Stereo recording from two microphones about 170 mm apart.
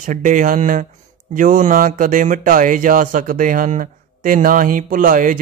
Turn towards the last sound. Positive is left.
turn(degrees=-50)  # may be behind; listen again after turning